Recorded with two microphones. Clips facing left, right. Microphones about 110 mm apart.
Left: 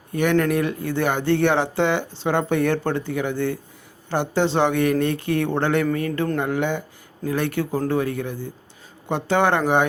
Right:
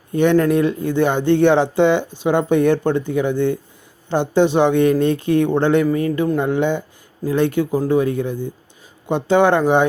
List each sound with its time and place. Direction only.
0.1 s speech: 25° right (ahead or behind)